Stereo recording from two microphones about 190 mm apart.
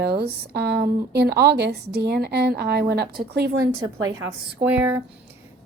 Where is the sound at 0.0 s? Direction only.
55° right (ahead or behind).